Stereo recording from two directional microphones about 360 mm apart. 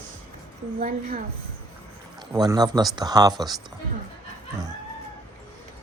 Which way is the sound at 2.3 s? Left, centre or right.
Centre.